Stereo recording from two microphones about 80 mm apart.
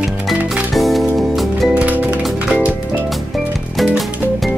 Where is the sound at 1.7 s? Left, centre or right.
Centre.